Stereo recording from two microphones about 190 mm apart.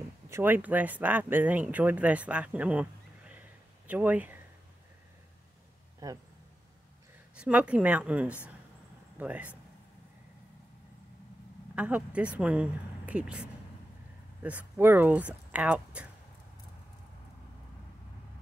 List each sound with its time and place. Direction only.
0.3 s speech: 10° right (ahead or behind)
6.0 s speech: 15° right (ahead or behind)
7.3 s speech: 5° right (ahead or behind)
11.7 s speech: 5° right (ahead or behind)